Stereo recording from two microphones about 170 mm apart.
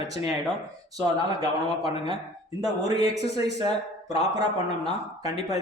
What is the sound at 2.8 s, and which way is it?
Speech, 20° right (ahead or behind).